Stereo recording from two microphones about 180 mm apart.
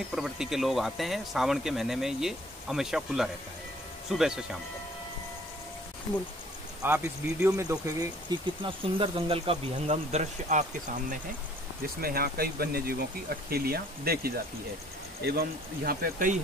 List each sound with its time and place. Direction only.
0.1 s speech: 5° right (ahead or behind)
6.8 s speech: 15° right (ahead or behind); by 11.1 s 45° right (ahead or behind)
11.8 s speech: 55° right (ahead or behind)